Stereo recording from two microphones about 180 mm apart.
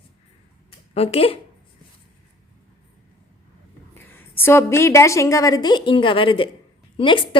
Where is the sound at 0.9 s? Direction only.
35° left (ahead or behind).